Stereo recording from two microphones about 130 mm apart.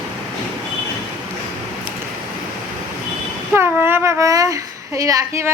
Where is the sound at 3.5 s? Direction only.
15° right (ahead or behind).